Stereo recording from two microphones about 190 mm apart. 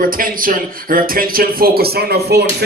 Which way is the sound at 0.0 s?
45° right (ahead or behind).